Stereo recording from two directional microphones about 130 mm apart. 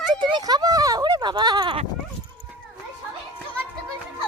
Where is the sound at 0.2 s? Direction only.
35° right (ahead or behind).